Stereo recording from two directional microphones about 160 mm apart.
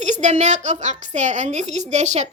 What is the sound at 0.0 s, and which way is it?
A woman's voice, 45° right (ahead or behind).